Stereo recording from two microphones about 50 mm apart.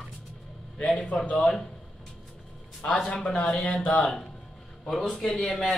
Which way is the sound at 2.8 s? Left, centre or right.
Left.